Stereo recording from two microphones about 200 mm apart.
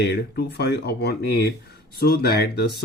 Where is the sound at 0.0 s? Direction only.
55° left (ahead or behind).